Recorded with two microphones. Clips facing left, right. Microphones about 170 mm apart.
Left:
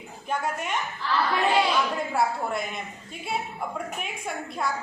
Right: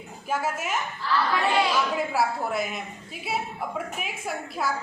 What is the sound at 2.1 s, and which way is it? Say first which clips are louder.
Speech: left 2 dB; 5° right (ahead or behind).